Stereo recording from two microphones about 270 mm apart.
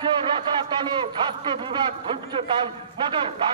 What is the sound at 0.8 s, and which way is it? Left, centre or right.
A man's voice, centre.